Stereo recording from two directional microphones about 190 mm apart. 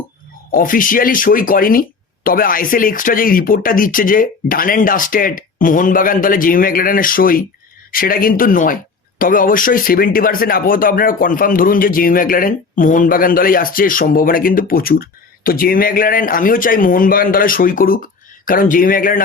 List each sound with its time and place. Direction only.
0.5 s speech: 45° left (ahead or behind)